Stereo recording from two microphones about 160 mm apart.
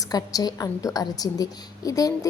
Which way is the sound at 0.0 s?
25° left (ahead or behind).